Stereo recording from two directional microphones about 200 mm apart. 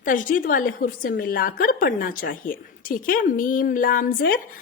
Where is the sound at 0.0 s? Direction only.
40° left (ahead or behind).